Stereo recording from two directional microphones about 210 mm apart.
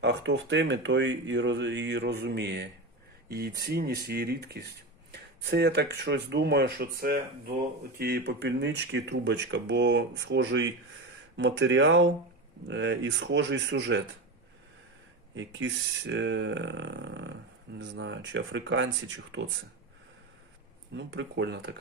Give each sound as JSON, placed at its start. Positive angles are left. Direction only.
{"t": 0.0, "sound": "speech", "side_deg": -55}
{"t": 15.4, "sound": "speech", "side_deg": -60}
{"t": 20.9, "sound": "speech", "side_deg": -55}